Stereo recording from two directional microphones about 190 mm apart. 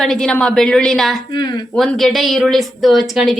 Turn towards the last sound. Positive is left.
turn(degrees=0)  # may be behind; listen again after turning